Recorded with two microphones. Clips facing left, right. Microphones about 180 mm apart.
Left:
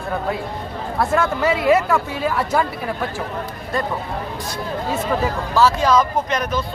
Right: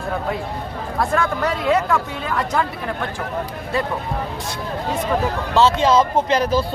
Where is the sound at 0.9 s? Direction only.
5° left (ahead or behind).